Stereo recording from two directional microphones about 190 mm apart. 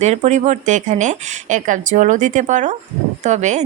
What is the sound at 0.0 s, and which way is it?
A woman's voice, 35° right (ahead or behind).